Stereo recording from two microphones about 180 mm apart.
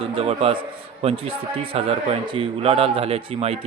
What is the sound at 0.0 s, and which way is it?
Speech, 30° right (ahead or behind).